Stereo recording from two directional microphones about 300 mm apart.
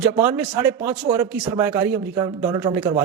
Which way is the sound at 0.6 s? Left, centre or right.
Centre.